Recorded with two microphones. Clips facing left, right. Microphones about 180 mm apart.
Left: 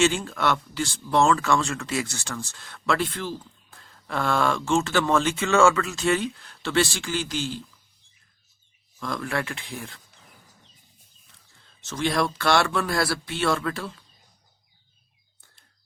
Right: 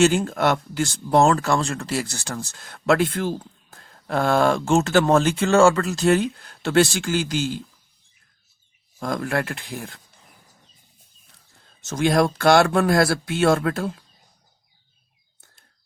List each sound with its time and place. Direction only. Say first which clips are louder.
0.3 s speech: right 4 dB; 45° right (ahead or behind)
9.0 s speech: right 4 dB; 45° right (ahead or behind)
11.6 s speech: right 5 dB; 45° right (ahead or behind)